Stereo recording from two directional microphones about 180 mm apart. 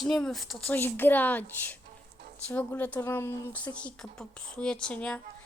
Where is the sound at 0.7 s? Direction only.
10° left (ahead or behind).